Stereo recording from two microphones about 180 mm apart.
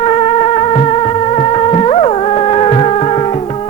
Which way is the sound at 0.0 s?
35° left (ahead or behind).